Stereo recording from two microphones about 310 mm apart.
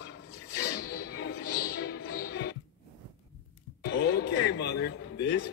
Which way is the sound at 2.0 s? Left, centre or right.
Left.